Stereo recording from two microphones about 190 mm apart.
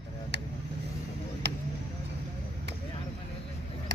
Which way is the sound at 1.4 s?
65° right (ahead or behind).